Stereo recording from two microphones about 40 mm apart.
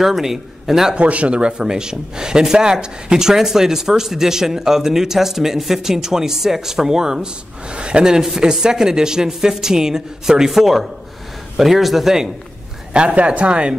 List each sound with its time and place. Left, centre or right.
0.0 s speech: centre
0.9 s speech: right; by 7.2 s centre
7.7 s speech: right; by 12.3 s centre
12.9 s speech: right